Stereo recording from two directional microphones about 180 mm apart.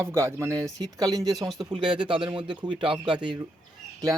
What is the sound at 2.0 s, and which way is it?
Speech, 25° right (ahead or behind).